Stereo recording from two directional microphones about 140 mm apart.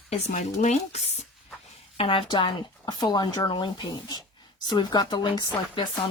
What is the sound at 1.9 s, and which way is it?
Speech, 40° left (ahead or behind).